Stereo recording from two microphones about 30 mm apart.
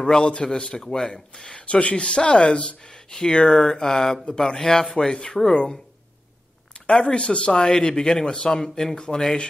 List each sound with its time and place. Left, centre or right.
0.3 s speech: left
1.8 s speech: left
2.0 s speech: left; by 4.8 s centre
4.8 s speech: left
6.7 s speech: left
7.5 s speech: left